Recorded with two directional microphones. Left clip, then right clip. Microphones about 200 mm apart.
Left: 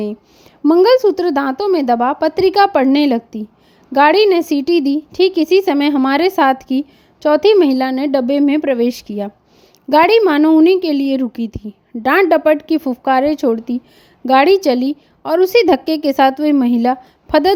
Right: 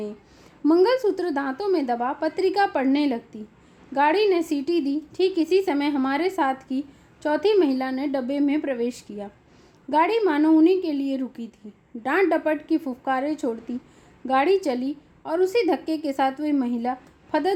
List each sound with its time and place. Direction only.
0.6 s a woman's voice: 40° left (ahead or behind)